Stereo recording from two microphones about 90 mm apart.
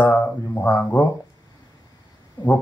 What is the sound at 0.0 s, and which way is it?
Speech, 20° left (ahead or behind).